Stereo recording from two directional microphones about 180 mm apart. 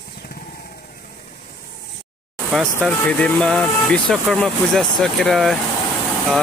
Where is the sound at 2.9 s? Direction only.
5° left (ahead or behind).